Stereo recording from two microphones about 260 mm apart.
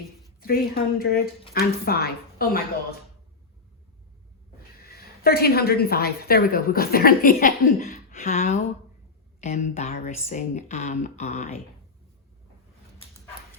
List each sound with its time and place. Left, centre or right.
0.3 s a woman's voice: left
4.9 s a woman's voice: left